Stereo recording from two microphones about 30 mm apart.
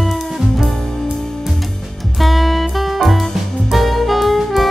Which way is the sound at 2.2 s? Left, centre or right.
Centre.